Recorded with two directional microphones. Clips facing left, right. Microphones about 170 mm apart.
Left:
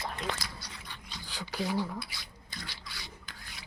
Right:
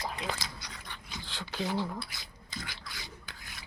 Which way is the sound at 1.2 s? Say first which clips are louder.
Left 1 dB; 10° left (ahead or behind).